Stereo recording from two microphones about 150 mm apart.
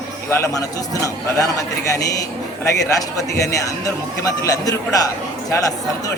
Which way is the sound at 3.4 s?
20° left (ahead or behind).